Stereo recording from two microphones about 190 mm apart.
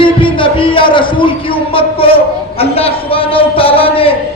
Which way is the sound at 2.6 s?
30° left (ahead or behind).